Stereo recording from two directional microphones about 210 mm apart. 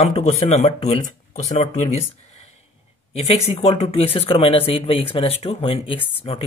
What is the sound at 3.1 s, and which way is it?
Speech, 30° left (ahead or behind).